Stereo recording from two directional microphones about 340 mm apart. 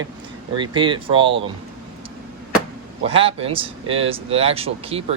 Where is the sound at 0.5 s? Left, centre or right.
Centre.